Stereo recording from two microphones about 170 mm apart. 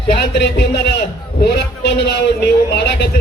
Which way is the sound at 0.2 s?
75° left (ahead or behind).